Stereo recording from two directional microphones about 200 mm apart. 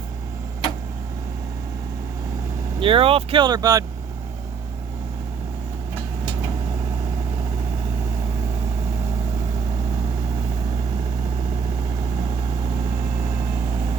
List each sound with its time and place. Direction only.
2.8 s speech: 25° right (ahead or behind)